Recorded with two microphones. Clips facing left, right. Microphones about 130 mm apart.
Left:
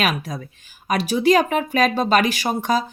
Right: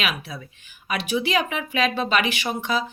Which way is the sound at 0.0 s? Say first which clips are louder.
Left 6 dB; 45° left (ahead or behind).